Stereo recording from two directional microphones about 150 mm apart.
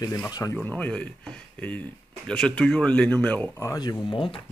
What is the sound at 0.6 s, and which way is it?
Speech, 10° left (ahead or behind).